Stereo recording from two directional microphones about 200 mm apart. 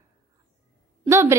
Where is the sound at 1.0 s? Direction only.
15° right (ahead or behind).